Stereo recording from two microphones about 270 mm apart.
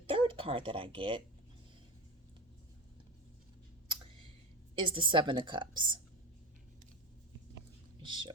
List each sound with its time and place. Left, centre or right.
0.1 s speech: centre
4.7 s a woman's voice: centre
8.0 s speech: centre